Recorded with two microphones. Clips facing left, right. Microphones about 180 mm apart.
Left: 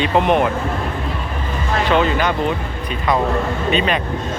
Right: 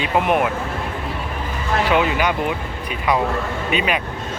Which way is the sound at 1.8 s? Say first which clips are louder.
Left 2 dB; 10° right (ahead or behind).